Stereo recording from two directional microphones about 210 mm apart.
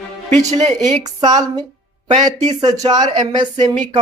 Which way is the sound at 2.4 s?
25° right (ahead or behind).